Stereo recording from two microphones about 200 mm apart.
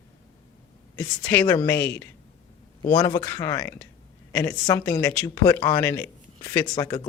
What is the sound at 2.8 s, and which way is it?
Speech, 20° left (ahead or behind).